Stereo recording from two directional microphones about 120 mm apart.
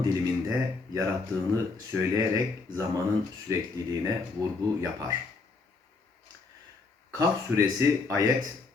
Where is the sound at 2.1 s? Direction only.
30° right (ahead or behind).